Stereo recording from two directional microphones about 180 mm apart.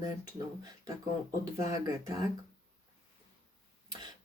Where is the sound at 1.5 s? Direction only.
20° right (ahead or behind).